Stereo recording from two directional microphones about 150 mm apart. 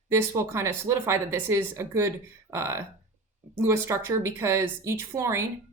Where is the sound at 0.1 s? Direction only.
20° right (ahead or behind).